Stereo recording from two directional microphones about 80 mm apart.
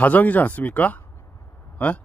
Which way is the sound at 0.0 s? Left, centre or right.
Centre.